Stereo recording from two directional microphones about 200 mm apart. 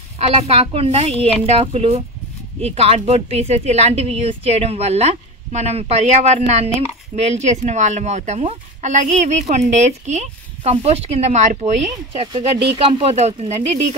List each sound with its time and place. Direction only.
0.2 s speech: 30° right (ahead or behind)